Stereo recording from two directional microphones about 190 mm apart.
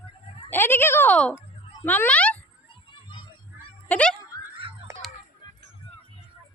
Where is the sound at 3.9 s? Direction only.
5° left (ahead or behind).